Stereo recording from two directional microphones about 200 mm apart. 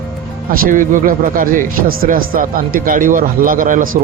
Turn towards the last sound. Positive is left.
turn(degrees=-45)  # may be behind; listen again after turning